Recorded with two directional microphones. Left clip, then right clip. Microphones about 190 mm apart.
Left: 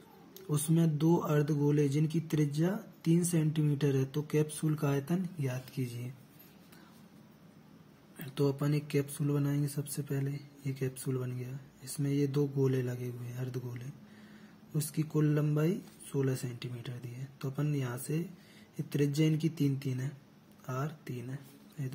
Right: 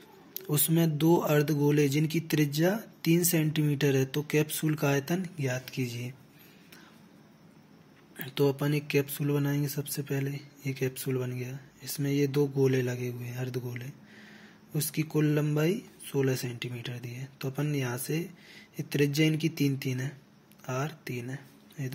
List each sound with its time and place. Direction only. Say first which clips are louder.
0.3 s speech: right 4 dB; 15° right (ahead or behind)
8.2 s speech: right 5 dB; centre (ahead or behind)